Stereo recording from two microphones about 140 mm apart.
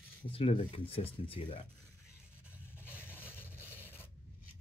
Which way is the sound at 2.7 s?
15° left (ahead or behind).